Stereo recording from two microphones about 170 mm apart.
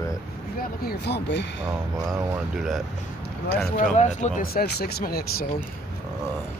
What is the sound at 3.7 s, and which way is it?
Speech, 45° left (ahead or behind).